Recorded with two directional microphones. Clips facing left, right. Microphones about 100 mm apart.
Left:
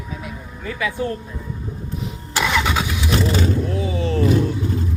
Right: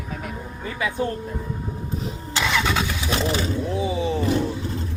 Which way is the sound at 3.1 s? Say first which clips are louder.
Left 3 dB; 30° right (ahead or behind).